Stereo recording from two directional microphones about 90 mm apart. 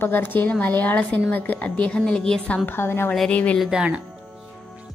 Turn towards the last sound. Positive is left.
turn(degrees=-10)  # may be behind; listen again after turning